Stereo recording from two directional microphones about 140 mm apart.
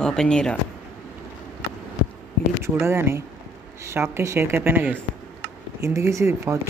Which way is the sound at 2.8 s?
20° right (ahead or behind).